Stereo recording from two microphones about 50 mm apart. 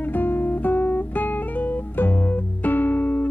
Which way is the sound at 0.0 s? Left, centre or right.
Left.